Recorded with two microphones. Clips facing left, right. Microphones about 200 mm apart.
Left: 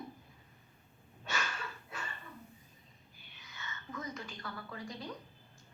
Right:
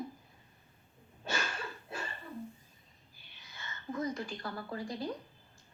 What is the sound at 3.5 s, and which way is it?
A woman's voice, 30° right (ahead or behind).